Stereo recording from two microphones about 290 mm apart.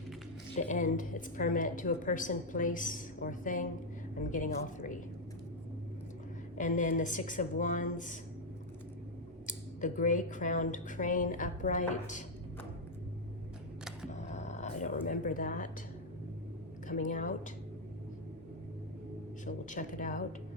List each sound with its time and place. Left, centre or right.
0.7 s a woman's voice: left
6.6 s a woman's voice: left
9.5 s a woman's voice: left
14.1 s music: left
16.9 s a woman's voice: left
19.5 s a woman's voice: left